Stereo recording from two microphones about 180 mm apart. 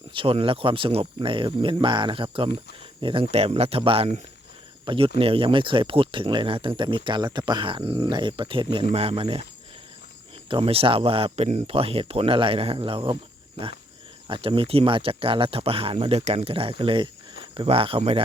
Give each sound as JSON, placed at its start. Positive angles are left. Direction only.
{"t": 0.1, "sound": "speech", "side_deg": -30}
{"t": 10.5, "sound": "speech", "side_deg": -30}
{"t": 14.3, "sound": "speech", "side_deg": -30}